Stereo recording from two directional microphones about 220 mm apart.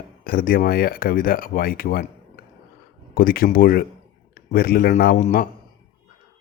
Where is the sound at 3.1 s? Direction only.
40° left (ahead or behind).